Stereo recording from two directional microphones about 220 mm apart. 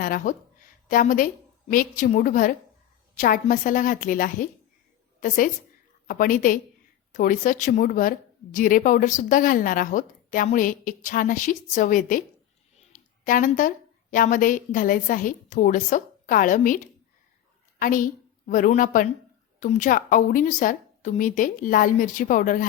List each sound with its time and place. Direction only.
0.0 s a woman's voice: 40° left (ahead or behind)
6.1 s a woman's voice: 40° left (ahead or behind)